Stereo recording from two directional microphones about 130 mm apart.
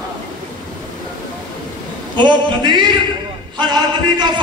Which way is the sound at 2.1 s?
35° right (ahead or behind).